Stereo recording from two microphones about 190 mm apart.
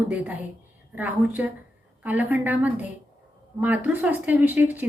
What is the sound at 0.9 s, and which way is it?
A woman's voice, 10° right (ahead or behind).